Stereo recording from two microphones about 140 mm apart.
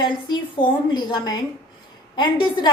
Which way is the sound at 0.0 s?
35° left (ahead or behind).